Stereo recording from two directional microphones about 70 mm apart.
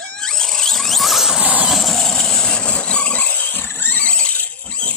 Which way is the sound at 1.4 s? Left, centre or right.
Right.